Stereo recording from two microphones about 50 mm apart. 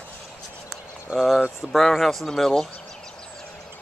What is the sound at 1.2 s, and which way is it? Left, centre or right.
Speech, centre.